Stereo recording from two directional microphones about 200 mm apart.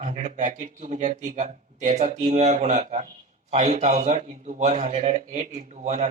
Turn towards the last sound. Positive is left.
turn(degrees=-35)  # may be behind; listen again after turning